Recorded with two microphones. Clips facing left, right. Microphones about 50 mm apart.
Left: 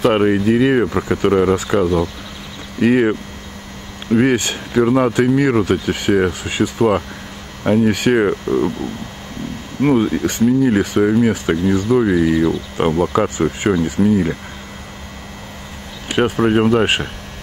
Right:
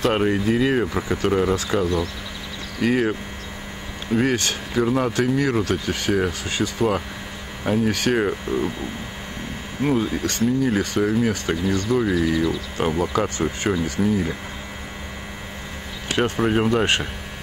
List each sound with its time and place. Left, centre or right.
0.1 s speech: centre
4.2 s speech: centre
8.5 s speech: centre
9.8 s speech: left
10.1 s speech: centre
16.4 s speech: centre